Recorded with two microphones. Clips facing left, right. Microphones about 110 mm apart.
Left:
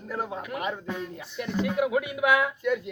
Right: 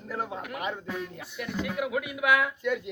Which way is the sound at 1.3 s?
5° right (ahead or behind).